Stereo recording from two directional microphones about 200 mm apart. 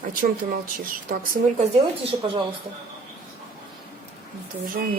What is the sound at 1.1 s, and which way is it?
Speech, 45° right (ahead or behind).